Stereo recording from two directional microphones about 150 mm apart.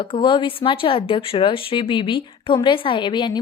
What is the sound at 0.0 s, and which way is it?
Speech, 35° left (ahead or behind).